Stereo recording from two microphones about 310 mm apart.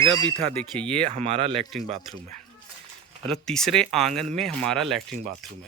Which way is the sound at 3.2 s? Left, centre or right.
Centre.